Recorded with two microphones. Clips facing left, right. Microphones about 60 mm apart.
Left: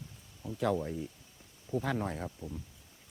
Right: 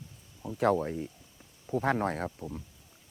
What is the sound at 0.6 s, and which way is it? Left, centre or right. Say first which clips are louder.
Speech: right 5 dB; right.